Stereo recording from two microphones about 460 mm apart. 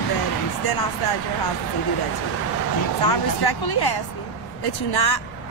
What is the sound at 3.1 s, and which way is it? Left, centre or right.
Speech, left.